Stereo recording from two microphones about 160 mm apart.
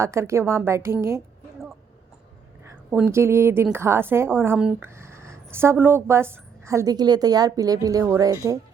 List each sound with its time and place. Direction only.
0.0 s speech: 15° right (ahead or behind)
2.6 s speech: 15° right (ahead or behind)